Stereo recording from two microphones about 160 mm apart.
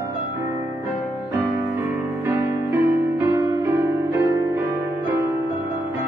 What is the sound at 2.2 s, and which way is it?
Music, 15° right (ahead or behind).